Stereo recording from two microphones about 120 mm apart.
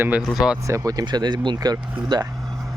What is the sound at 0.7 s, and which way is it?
Speech, 30° right (ahead or behind).